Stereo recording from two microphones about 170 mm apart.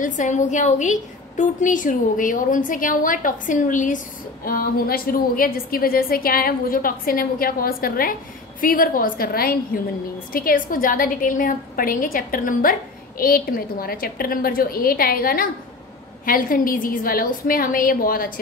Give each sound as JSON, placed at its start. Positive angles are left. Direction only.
{"t": 0.0, "sound": "a woman's voice", "side_deg": 50}
{"t": 4.5, "sound": "a woman's voice", "side_deg": 60}